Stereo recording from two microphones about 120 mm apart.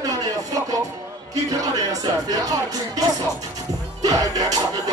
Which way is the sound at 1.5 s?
30° right (ahead or behind).